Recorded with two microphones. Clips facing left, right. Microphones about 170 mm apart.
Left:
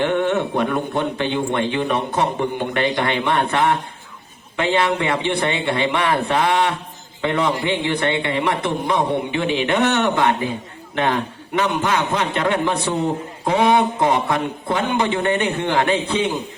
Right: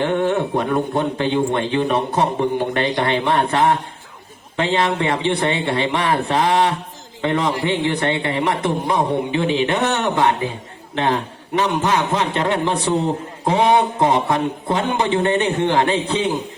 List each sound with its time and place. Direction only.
0.0 s a man's voice: 35° right (ahead or behind)